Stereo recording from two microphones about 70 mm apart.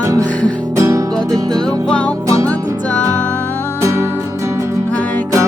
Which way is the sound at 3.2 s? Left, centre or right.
Left.